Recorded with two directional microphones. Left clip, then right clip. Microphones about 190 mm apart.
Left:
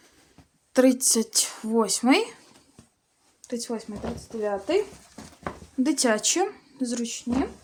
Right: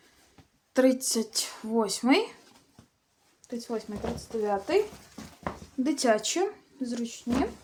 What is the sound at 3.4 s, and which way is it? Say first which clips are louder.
Speech: left 3 dB; 50° left (ahead or behind).